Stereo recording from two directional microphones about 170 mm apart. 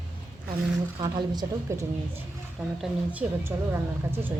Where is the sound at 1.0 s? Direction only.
25° right (ahead or behind).